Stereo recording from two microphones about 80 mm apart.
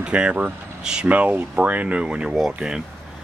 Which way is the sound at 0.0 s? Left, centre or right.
Centre.